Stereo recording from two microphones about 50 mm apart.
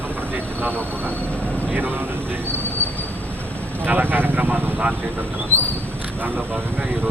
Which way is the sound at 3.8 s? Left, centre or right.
Right.